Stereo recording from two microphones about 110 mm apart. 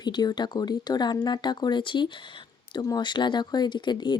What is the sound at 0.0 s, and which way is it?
Speech, 40° left (ahead or behind).